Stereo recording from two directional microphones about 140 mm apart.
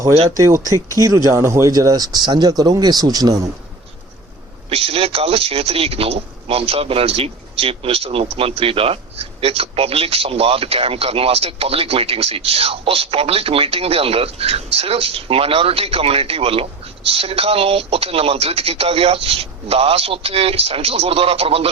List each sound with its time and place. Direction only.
0.3 s speech: 20° right (ahead or behind)
4.7 s speech: 45° right (ahead or behind)